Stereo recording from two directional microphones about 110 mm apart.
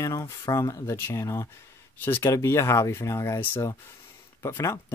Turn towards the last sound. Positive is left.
turn(degrees=25)  # may be behind; listen again after turning